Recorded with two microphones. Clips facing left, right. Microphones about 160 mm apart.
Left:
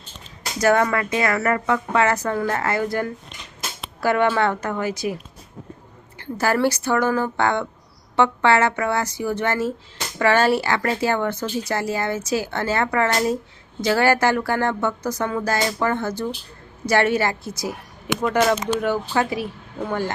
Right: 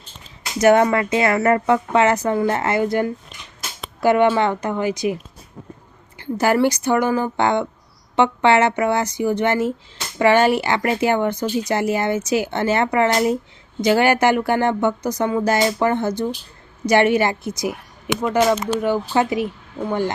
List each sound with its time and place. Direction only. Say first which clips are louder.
0.6 s speech: right 4 dB; 20° right (ahead or behind)
6.1 s speech: right 4 dB; 20° right (ahead or behind)